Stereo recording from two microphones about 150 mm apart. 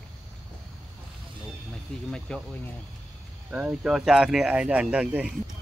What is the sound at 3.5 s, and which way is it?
Speech, 10° right (ahead or behind).